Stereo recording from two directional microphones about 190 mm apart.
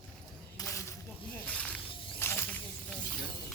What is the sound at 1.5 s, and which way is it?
Snake, 5° left (ahead or behind).